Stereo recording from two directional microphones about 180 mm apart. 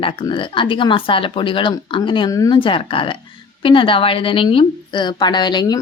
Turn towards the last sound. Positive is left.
turn(degrees=25)  # may be behind; listen again after turning